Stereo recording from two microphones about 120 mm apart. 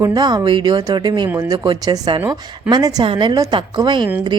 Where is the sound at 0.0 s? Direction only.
35° right (ahead or behind).